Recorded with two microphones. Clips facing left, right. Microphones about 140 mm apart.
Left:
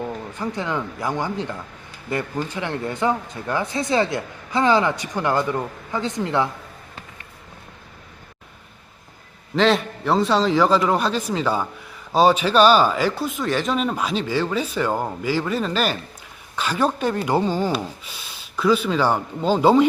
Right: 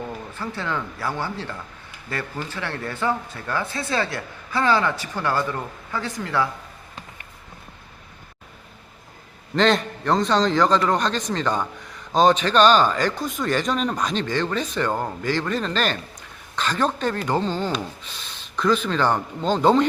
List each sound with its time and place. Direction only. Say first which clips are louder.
0.0 s speech: left 4 dB; 15° left (ahead or behind)
9.6 s a man's voice: left 1 dB; 5° left (ahead or behind)